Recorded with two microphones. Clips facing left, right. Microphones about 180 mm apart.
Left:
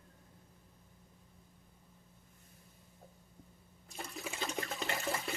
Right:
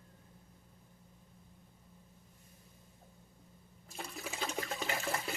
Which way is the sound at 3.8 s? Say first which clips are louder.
Even; 5° right (ahead or behind).